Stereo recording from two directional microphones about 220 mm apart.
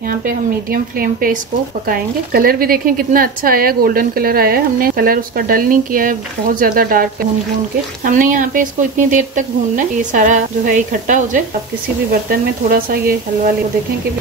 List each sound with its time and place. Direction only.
0.2 s speech: 40° right (ahead or behind)